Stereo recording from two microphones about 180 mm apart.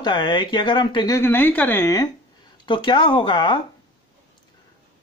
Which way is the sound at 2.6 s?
25° left (ahead or behind).